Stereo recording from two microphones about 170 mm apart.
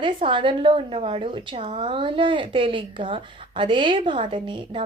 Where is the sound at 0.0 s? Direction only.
30° right (ahead or behind).